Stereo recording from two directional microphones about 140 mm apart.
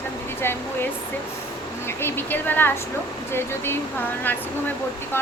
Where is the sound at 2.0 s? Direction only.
15° left (ahead or behind).